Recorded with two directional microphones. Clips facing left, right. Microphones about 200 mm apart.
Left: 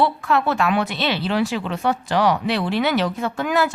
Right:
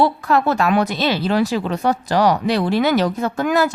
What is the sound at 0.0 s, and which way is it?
A woman's voice, 40° right (ahead or behind).